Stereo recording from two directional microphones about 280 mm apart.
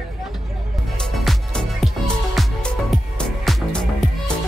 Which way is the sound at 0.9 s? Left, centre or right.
Centre.